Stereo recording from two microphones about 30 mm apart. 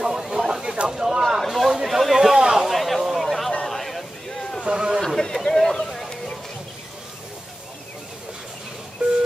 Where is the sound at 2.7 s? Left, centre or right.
Centre.